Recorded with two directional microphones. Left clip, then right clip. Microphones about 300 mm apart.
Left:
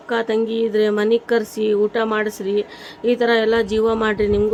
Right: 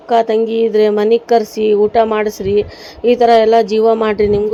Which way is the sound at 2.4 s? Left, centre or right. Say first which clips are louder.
Right 7 dB; left.